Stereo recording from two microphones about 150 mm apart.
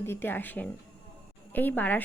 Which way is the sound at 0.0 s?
15° left (ahead or behind).